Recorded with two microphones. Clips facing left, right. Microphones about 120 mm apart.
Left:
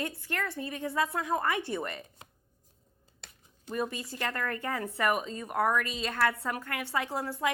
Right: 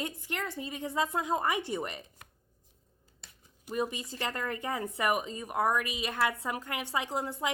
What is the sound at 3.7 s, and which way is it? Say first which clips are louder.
A woman's voice: even; 15° right (ahead or behind).